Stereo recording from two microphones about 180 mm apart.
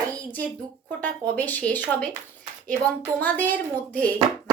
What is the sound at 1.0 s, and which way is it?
A woman's voice, 10° left (ahead or behind).